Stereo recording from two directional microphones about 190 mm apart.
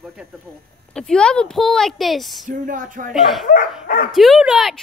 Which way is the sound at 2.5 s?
45° right (ahead or behind).